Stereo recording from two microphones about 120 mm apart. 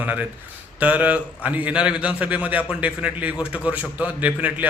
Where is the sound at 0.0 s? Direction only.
15° right (ahead or behind).